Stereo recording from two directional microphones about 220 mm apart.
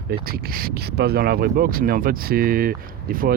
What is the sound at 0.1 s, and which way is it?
Speech, 45° right (ahead or behind).